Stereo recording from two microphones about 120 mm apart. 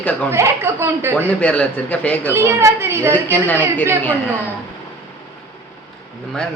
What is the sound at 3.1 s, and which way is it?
Speech, 15° left (ahead or behind).